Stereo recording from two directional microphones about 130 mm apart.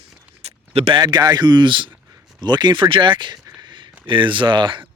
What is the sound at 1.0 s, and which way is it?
Speech, 35° right (ahead or behind).